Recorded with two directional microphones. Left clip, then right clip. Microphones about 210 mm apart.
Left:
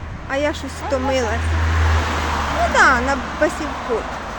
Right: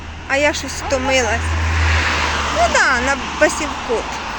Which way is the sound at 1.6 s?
25° left (ahead or behind).